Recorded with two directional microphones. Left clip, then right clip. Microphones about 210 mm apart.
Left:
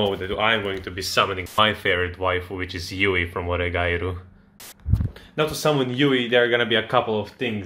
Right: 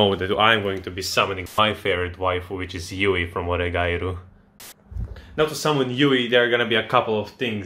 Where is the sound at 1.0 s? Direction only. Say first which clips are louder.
Left 1 dB; 5° right (ahead or behind).